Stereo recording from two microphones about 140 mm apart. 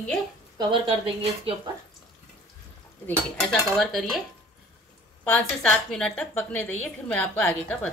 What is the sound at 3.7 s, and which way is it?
Dishes, centre (ahead or behind).